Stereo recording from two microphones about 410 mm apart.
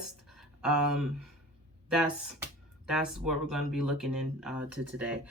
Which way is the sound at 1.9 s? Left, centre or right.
Centre.